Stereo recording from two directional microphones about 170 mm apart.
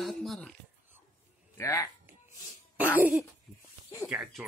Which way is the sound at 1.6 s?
20° left (ahead or behind).